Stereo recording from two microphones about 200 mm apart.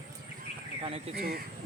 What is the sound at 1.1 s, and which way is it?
Speech, 50° right (ahead or behind).